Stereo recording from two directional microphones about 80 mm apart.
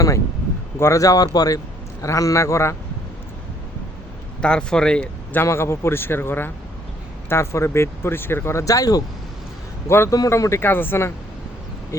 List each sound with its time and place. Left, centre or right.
0.8 s a man's voice: left
4.4 s speech: centre
5.5 s a man's voice: left
9.8 s speech: left